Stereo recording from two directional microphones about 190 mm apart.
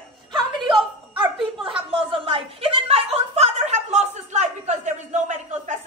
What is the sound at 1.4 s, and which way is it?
Chuckle, 25° right (ahead or behind).